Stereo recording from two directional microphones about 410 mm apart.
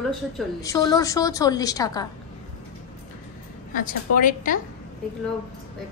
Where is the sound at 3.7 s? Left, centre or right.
Centre.